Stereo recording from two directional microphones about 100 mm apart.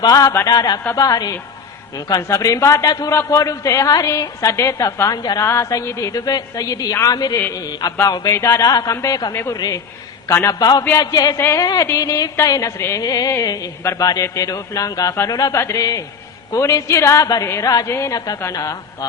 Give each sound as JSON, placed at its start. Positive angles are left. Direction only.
{"t": 0.0, "sound": "a woman's voice", "side_deg": 40}
{"t": 5.4, "sound": "a woman's voice", "side_deg": 30}
{"t": 8.3, "sound": "a woman's voice", "side_deg": 30}
{"t": 10.2, "sound": "a man's voice", "side_deg": 25}
{"t": 10.5, "sound": "a woman's voice", "side_deg": 40}
{"t": 11.3, "sound": "a man's voice", "side_deg": 25}
{"t": 11.6, "sound": "a woman's voice", "side_deg": 40}